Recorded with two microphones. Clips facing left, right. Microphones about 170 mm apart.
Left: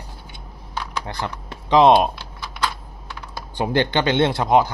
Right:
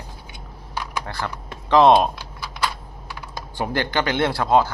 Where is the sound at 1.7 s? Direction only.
15° left (ahead or behind).